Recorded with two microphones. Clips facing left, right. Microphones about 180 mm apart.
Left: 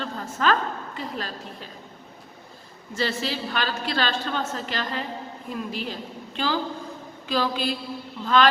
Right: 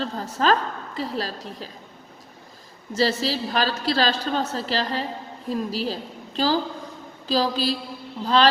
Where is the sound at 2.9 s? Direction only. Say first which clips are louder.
Right 5 dB; 40° right (ahead or behind).